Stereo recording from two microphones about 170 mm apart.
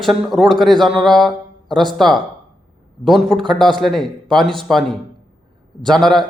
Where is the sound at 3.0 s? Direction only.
Centre (ahead or behind).